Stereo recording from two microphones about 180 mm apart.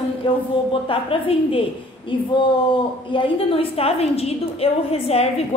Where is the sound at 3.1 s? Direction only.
35° left (ahead or behind).